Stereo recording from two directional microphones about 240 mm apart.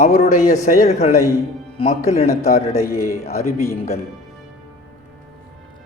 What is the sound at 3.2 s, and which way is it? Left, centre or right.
Speech, left.